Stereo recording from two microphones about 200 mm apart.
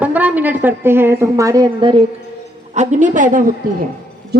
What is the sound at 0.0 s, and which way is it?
A woman's voice, 10° right (ahead or behind).